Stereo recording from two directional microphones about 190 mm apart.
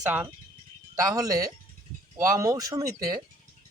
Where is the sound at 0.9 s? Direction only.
15° right (ahead or behind).